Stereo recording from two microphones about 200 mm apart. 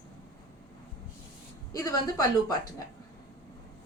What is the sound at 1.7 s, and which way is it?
Speech, 15° left (ahead or behind).